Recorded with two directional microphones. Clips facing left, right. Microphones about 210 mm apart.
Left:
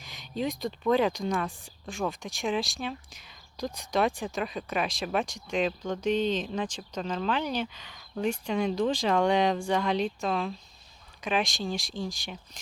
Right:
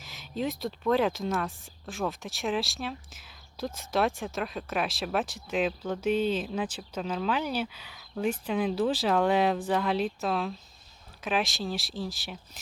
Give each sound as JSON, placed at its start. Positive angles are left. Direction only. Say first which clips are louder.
{"t": 0.0, "sound": "speech", "louder": "even", "side_deg": 0}